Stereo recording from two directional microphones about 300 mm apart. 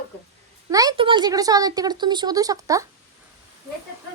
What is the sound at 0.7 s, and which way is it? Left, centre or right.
A woman's voice, centre.